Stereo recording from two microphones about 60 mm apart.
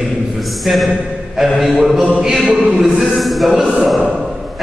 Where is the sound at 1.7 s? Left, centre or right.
Centre.